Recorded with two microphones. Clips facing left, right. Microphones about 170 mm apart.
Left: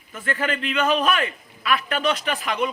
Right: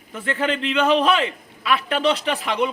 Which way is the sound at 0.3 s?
20° right (ahead or behind).